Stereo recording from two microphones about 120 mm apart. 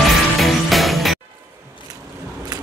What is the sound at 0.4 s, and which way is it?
Music, centre (ahead or behind).